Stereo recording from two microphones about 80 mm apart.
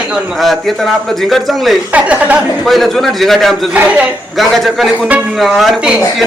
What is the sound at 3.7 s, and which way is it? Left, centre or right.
Speech, centre.